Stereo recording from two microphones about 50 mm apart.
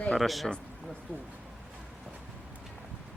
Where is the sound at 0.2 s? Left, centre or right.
Centre.